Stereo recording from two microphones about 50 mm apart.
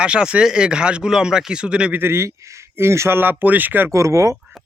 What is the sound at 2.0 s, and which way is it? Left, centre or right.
Speech, right.